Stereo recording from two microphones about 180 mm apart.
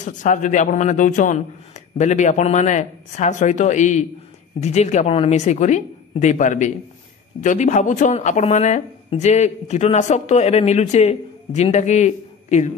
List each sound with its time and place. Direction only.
0.0 s speech: 45° left (ahead or behind)